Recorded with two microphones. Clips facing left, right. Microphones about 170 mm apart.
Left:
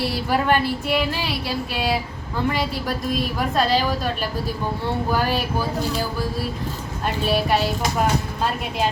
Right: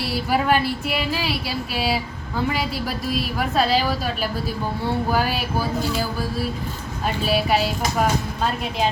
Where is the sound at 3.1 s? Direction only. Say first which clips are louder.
Left 1 dB; 5° right (ahead or behind).